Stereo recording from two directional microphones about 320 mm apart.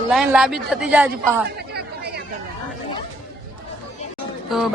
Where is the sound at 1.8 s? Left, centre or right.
Right.